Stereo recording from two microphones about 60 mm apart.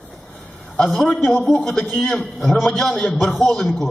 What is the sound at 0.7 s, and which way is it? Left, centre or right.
A man's voice, centre.